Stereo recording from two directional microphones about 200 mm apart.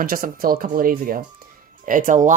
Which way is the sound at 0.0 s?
45° right (ahead or behind).